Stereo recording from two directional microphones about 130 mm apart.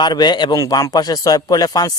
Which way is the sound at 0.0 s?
35° left (ahead or behind).